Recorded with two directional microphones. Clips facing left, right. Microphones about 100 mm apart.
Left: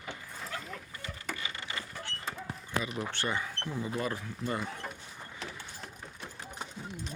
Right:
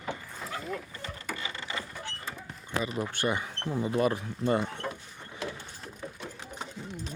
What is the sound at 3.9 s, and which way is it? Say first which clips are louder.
Speech: right 9 dB; 25° right (ahead or behind).